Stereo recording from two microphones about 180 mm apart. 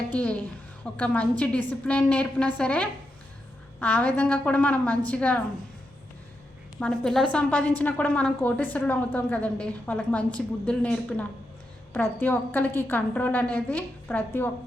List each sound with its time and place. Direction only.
0.1 s a woman's voice: 10° left (ahead or behind)
6.7 s a woman's voice: 5° left (ahead or behind)